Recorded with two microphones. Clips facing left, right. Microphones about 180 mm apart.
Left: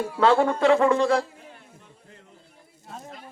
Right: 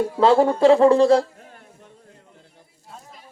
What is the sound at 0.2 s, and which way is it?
Speech, 35° right (ahead or behind).